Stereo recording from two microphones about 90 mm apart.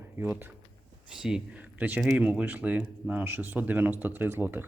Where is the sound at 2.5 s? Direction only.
15° right (ahead or behind).